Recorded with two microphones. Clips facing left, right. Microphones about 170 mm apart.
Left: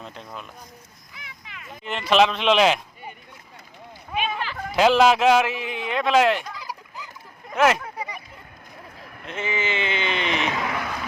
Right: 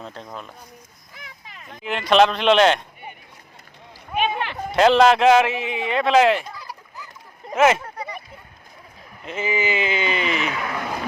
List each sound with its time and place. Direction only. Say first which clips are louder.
1.1 s a sound: right 1 dB; 40° right (ahead or behind)
1.8 s speech: right 2 dB; centre (ahead or behind)
4.1 s a sound: right 4 dB; 60° right (ahead or behind)
4.7 s speech: right 2 dB; centre (ahead or behind)
6.6 s fowl: left 2 dB; 15° left (ahead or behind)
7.5 s speech: right 2 dB; centre (ahead or behind)
9.2 s speech: right 4 dB; 5° right (ahead or behind)
10.3 s speech: even; 35° left (ahead or behind)